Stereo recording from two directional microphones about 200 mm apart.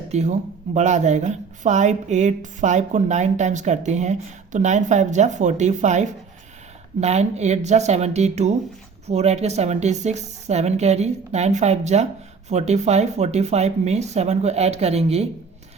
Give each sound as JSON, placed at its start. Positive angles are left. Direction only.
{"t": 0.1, "sound": "speech", "side_deg": -35}